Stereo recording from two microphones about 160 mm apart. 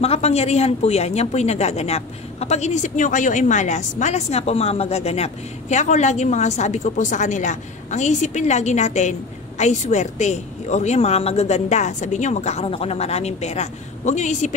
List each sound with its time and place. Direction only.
0.0 s a woman's voice: 40° left (ahead or behind)